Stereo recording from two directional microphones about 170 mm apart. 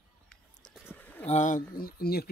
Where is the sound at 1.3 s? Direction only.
50° left (ahead or behind); by 2.2 s 65° left (ahead or behind).